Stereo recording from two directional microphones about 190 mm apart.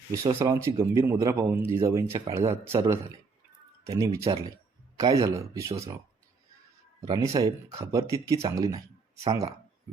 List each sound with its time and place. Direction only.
0.1 s speech: 15° right (ahead or behind)
7.0 s speech: 20° right (ahead or behind)